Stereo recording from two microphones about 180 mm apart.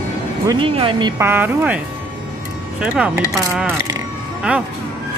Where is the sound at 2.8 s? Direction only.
5° right (ahead or behind).